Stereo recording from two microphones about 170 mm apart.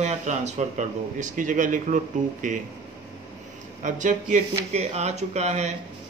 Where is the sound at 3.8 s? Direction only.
45° right (ahead or behind).